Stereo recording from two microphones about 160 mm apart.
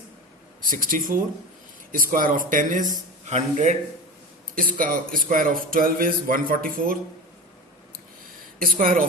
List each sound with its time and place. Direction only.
0.6 s a man's voice: 60° right (ahead or behind)
4.5 s speech: 55° right (ahead or behind)
8.5 s speech: 60° right (ahead or behind)